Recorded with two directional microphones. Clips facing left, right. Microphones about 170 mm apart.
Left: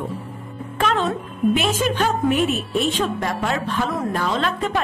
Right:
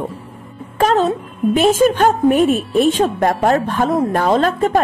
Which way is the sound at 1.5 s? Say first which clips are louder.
Right 8 dB; 45° right (ahead or behind).